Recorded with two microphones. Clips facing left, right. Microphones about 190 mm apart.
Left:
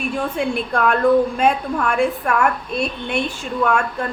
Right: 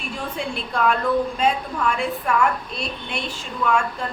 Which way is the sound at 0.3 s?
55° left (ahead or behind).